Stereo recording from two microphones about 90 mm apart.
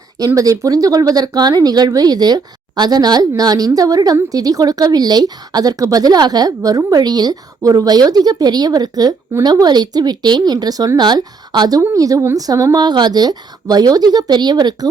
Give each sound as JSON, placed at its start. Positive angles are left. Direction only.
{"t": 0.3, "sound": "speech", "side_deg": -35}
{"t": 11.8, "sound": "speech", "side_deg": -35}
{"t": 12.8, "sound": "speech", "side_deg": -55}